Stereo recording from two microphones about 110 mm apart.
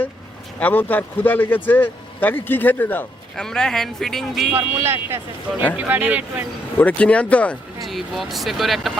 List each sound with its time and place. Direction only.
0.6 s speech: 15° left (ahead or behind)
3.3 s speech: 5° left (ahead or behind)
4.5 s speech: 20° right (ahead or behind)
6.7 s speech: 15° left (ahead or behind)
7.8 s speech: centre (ahead or behind)